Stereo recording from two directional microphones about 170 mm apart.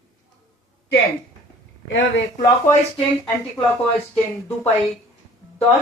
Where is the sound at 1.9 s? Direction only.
90° left.